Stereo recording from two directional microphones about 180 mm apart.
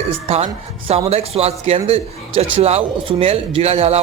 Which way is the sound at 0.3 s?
35° right (ahead or behind).